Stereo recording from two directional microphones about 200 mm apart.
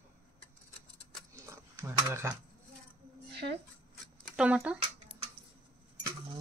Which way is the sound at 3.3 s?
55° right (ahead or behind).